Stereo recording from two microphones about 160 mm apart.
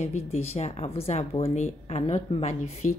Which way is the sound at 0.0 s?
45° left (ahead or behind).